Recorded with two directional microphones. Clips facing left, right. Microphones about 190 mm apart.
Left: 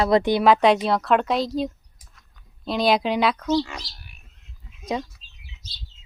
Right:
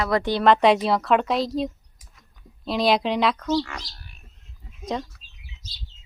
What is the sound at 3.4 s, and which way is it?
Speech, 15° left (ahead or behind).